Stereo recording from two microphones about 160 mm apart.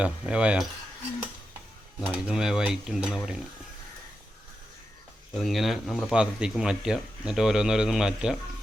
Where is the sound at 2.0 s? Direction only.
5° right (ahead or behind).